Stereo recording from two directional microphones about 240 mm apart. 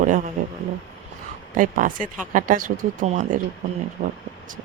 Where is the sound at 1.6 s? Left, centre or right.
Right.